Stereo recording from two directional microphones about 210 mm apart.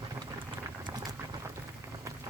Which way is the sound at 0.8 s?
20° right (ahead or behind).